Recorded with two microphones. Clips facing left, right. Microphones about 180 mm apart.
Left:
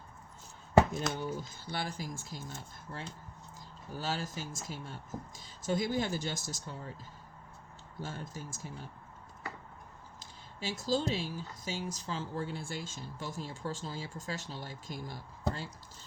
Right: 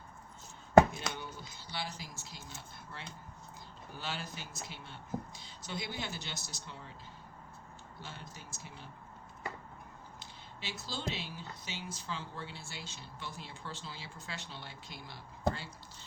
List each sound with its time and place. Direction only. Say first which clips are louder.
1.1 s speech: left 4 dB; centre (ahead or behind)
1.4 s speech: left 4 dB; 50° left (ahead or behind)
7.9 s speech: left 8 dB; 45° left (ahead or behind)
10.2 s speech: left 8 dB; 45° left (ahead or behind)